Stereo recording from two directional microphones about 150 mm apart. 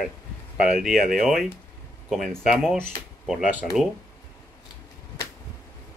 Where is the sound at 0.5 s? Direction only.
5° right (ahead or behind).